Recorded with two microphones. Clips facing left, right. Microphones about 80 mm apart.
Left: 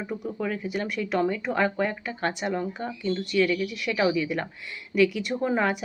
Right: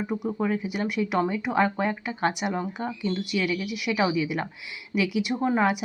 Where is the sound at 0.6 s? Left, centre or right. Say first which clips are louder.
Right 2 dB; centre.